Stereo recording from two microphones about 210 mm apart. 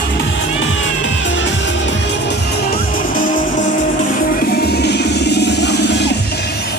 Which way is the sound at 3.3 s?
35° left (ahead or behind).